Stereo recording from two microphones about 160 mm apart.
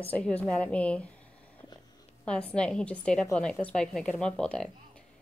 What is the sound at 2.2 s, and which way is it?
A woman's voice, 5° left (ahead or behind).